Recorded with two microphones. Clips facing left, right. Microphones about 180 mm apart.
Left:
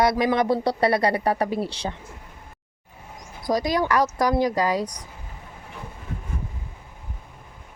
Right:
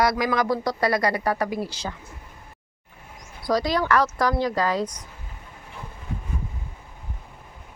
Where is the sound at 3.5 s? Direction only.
20° left (ahead or behind).